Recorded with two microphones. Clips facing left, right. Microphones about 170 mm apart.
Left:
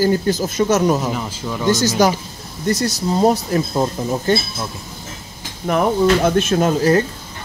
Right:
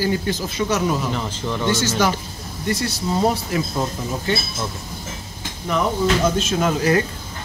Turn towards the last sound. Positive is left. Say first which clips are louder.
# left 4 dB
turn(degrees=35)  # may be behind; listen again after turning